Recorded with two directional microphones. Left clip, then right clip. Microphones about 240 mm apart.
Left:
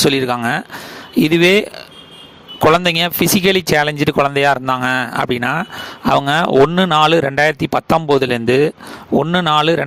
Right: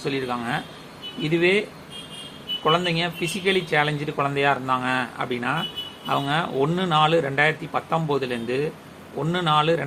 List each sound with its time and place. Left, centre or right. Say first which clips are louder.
0.0 s speech: left 12 dB; left
2.6 s speech: left 10 dB; left